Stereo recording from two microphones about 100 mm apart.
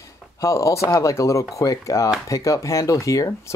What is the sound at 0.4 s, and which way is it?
Speech, 30° left (ahead or behind).